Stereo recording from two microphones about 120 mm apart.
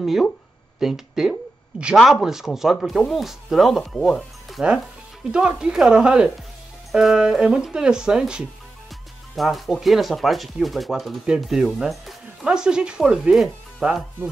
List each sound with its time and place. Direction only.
0.0 s speech: centre (ahead or behind)